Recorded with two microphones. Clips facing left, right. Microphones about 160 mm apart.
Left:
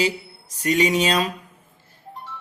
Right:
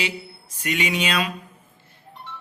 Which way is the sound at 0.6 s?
40° left (ahead or behind).